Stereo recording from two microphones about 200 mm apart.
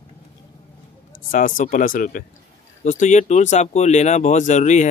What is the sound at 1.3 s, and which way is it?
Speech, 45° left (ahead or behind).